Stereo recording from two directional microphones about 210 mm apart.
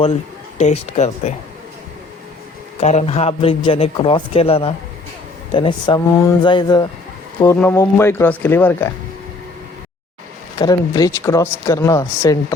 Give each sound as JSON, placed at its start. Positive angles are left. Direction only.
{"t": 0.6, "sound": "speech", "side_deg": 30}
{"t": 2.8, "sound": "a man's voice", "side_deg": 30}
{"t": 10.6, "sound": "speech", "side_deg": 20}